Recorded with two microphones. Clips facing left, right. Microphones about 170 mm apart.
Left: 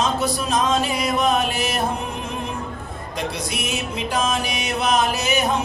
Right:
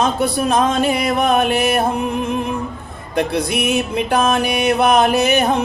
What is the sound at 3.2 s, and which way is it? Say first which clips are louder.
Music: right 9 dB; 60° right (ahead or behind).